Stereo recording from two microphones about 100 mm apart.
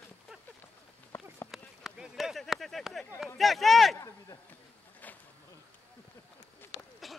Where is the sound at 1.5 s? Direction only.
5° right (ahead or behind).